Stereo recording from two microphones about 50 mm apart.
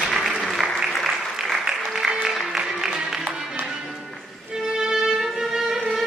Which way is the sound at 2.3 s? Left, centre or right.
Centre.